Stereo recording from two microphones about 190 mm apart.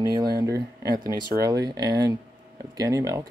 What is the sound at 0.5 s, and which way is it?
Speech, 60° right (ahead or behind).